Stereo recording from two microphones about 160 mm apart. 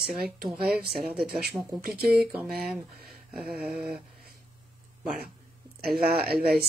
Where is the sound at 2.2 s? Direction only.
10° right (ahead or behind).